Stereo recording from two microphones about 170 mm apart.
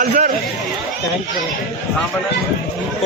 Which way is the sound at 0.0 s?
55° right (ahead or behind).